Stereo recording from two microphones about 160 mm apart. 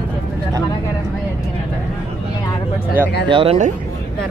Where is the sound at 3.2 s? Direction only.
30° right (ahead or behind).